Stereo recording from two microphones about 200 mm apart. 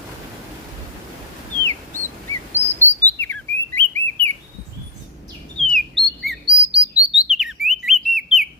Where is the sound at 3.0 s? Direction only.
10° left (ahead or behind).